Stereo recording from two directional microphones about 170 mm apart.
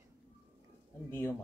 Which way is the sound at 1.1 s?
15° left (ahead or behind).